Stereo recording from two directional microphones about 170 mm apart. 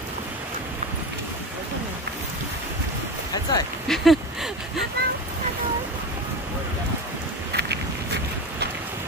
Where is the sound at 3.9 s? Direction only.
Centre (ahead or behind).